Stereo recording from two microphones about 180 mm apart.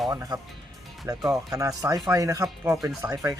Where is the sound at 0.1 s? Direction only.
20° right (ahead or behind).